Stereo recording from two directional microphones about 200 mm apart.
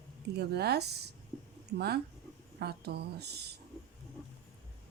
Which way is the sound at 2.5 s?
55° right (ahead or behind).